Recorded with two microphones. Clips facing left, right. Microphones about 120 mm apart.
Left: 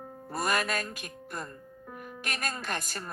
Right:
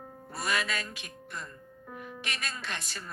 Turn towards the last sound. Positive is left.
turn(degrees=45)  # may be behind; listen again after turning